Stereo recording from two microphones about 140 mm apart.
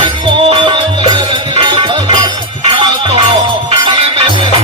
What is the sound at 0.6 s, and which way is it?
Music, 35° right (ahead or behind).